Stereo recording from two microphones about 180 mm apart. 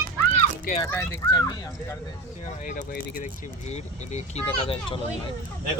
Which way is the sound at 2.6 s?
50° left (ahead or behind).